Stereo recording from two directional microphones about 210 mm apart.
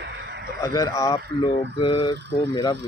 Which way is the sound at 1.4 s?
30° left (ahead or behind).